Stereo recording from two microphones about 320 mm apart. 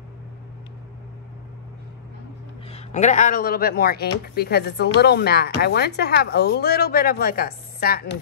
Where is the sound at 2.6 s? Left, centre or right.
Left.